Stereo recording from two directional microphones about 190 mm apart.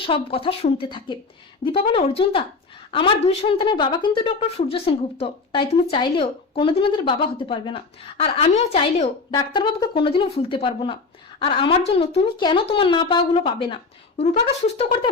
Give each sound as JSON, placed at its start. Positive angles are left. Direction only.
{"t": 0.0, "sound": "a woman's voice", "side_deg": 30}